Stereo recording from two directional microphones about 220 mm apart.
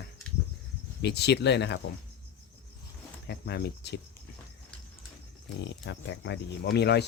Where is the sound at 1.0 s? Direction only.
50° left (ahead or behind).